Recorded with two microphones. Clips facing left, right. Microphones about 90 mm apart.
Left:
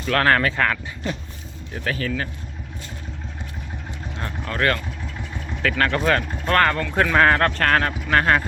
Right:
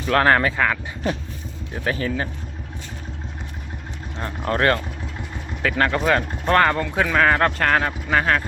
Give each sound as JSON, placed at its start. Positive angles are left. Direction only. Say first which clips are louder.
{"t": 0.1, "sound": "speech", "louder": "right 2 dB", "side_deg": -20}
{"t": 1.7, "sound": "speech", "louder": "right 2 dB", "side_deg": -25}
{"t": 4.4, "sound": "speech", "louder": "right 3 dB", "side_deg": -30}
{"t": 5.6, "sound": "speech", "louder": "right 1 dB", "side_deg": -20}
{"t": 6.9, "sound": "speech", "louder": "left 4 dB", "side_deg": 0}
{"t": 7.3, "sound": "speech", "louder": "even", "side_deg": -10}